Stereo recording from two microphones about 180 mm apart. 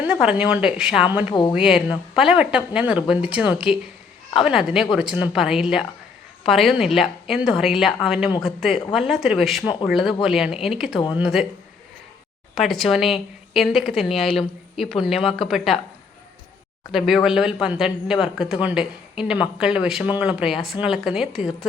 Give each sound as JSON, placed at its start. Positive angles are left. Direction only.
{"t": 0.1, "sound": "speech", "side_deg": -5}
{"t": 1.3, "sound": "speech", "side_deg": 25}
{"t": 1.5, "sound": "speech", "side_deg": -5}
{"t": 12.5, "sound": "speech", "side_deg": 0}
{"t": 16.9, "sound": "speech", "side_deg": 0}